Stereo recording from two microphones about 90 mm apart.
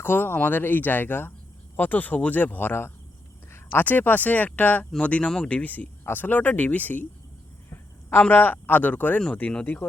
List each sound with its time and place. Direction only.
0.0 s speech: 25° left (ahead or behind)
8.3 s speech: 20° left (ahead or behind)